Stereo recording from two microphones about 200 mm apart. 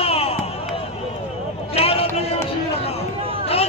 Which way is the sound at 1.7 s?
30° left (ahead or behind).